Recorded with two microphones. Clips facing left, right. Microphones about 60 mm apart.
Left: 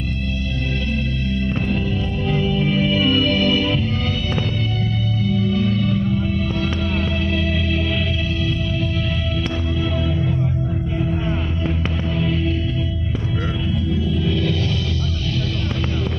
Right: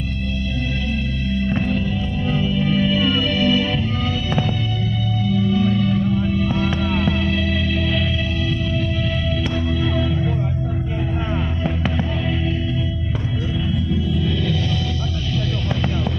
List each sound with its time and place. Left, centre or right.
3.3 s music: centre